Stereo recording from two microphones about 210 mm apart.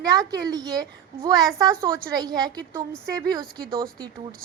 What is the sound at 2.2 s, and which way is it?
Speech, 20° right (ahead or behind).